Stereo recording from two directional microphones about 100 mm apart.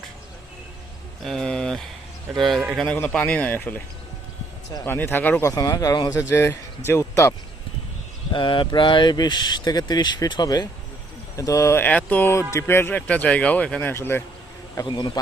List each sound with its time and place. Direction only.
1.2 s a man's voice: 5° left (ahead or behind)
2.7 s speech: 15° left (ahead or behind)
4.9 s speech: 20° left (ahead or behind)
5.5 s speech: 40° left (ahead or behind)
6.1 s speech: 25° left (ahead or behind)
8.3 s speech: 55° left (ahead or behind); by 11.8 s 30° left (ahead or behind)
11.8 s speech: 15° left (ahead or behind)
14.8 s speech: 50° left (ahead or behind)